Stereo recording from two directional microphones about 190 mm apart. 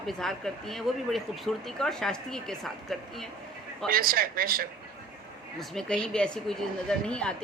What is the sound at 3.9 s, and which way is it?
Speech, 50° right (ahead or behind).